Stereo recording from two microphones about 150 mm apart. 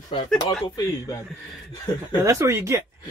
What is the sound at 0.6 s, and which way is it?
Speech, 25° left (ahead or behind).